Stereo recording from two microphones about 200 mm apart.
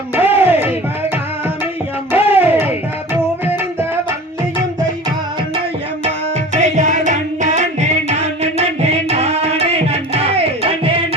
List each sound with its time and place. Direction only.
0.2 s music: 10° right (ahead or behind)
2.1 s music: 10° right (ahead or behind)
6.1 s music: 35° right (ahead or behind)